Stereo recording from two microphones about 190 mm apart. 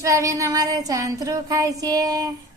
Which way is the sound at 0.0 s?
15° right (ahead or behind).